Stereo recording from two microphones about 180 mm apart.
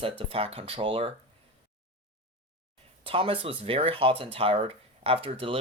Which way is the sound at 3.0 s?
30° right (ahead or behind).